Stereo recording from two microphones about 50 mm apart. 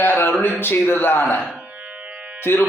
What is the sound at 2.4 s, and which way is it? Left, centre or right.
Speech, left.